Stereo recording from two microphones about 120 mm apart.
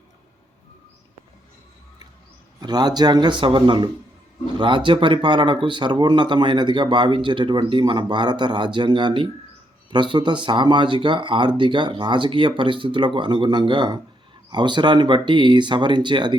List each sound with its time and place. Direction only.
2.6 s speech: 35° right (ahead or behind)